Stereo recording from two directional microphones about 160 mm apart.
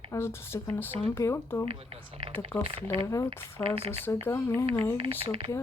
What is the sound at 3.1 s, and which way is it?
A woman's voice, 20° left (ahead or behind).